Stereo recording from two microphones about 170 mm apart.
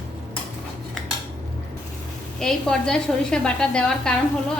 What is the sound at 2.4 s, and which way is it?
A woman's voice, 5° left (ahead or behind).